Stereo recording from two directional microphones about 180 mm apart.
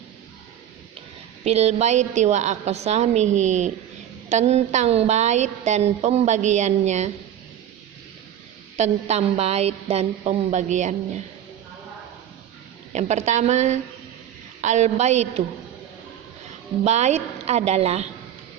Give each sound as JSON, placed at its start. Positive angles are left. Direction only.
{"t": 1.5, "sound": "a woman's voice", "side_deg": -35}
{"t": 8.8, "sound": "a woman's voice", "side_deg": -35}
{"t": 12.9, "sound": "a woman's voice", "side_deg": -40}
{"t": 16.8, "sound": "a woman's voice", "side_deg": -40}